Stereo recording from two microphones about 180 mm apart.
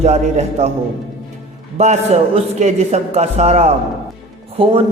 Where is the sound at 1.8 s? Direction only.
40° right (ahead or behind).